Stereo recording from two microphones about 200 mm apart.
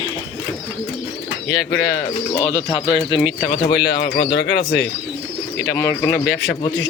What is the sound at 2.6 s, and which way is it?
Speech, 25° left (ahead or behind).